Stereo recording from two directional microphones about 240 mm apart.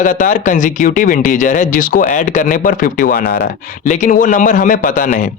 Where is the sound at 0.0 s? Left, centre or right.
Left.